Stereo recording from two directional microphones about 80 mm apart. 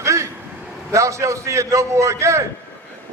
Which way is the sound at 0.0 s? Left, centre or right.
Right.